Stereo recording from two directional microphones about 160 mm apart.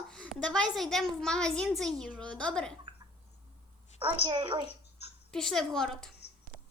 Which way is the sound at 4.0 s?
30° right (ahead or behind).